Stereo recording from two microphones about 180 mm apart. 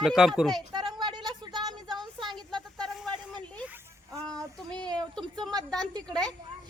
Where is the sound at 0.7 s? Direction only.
25° right (ahead or behind).